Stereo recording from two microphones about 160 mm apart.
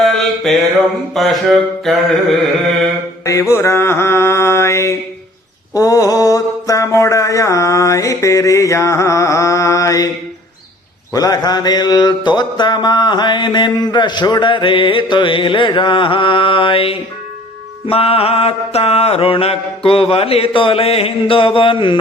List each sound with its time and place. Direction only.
0.0 s music: centre (ahead or behind)
1.1 s a sound: centre (ahead or behind)
3.2 s mantra: 20° left (ahead or behind)
11.1 s mantra: 25° left (ahead or behind)